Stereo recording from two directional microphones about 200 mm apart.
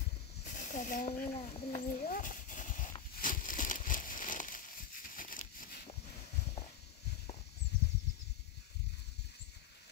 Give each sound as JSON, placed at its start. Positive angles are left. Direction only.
{"t": 0.4, "sound": "speech", "side_deg": 40}
{"t": 3.2, "sound": "a sound", "side_deg": 40}
{"t": 5.1, "sound": "crumpling", "side_deg": 40}